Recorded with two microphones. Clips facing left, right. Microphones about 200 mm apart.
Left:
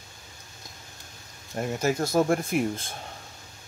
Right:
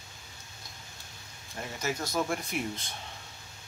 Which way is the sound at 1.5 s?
50° left (ahead or behind).